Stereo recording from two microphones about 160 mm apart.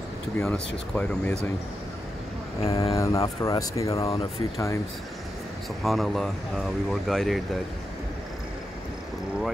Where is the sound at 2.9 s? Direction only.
20° left (ahead or behind).